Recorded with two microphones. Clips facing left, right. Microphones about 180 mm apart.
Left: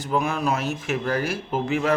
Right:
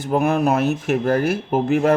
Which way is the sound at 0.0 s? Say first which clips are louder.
Right 6 dB; 60° right (ahead or behind).